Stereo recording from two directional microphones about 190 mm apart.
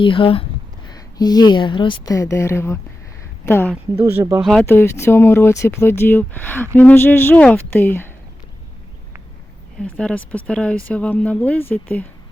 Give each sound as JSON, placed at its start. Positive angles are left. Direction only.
{"t": 0.0, "sound": "a woman's voice", "side_deg": 25}
{"t": 3.9, "sound": "speech", "side_deg": -10}
{"t": 4.4, "sound": "speech", "side_deg": 0}
{"t": 4.6, "sound": "speech", "side_deg": 10}
{"t": 9.8, "sound": "speech", "side_deg": 5}